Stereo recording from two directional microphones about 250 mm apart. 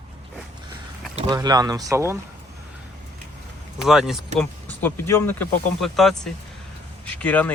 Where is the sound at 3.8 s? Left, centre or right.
Centre.